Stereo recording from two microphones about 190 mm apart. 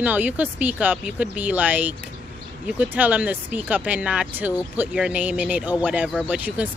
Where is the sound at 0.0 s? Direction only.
10° right (ahead or behind).